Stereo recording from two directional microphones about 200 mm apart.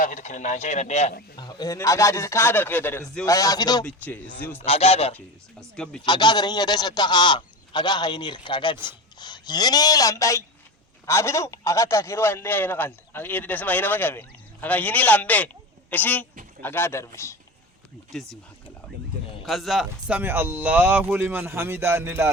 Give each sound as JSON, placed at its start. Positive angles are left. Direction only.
{"t": 0.0, "sound": "speech", "side_deg": 40}
{"t": 1.4, "sound": "a man's voice", "side_deg": 20}
{"t": 3.8, "sound": "a man's voice", "side_deg": 10}
{"t": 4.6, "sound": "speech", "side_deg": 30}
{"t": 5.1, "sound": "speech", "side_deg": 5}
{"t": 6.1, "sound": "a man's voice", "side_deg": 20}
{"t": 18.1, "sound": "speech", "side_deg": 5}
{"t": 19.5, "sound": "speech", "side_deg": 0}